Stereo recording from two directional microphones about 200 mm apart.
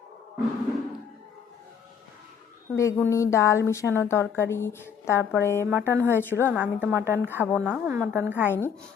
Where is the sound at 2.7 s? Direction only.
15° left (ahead or behind).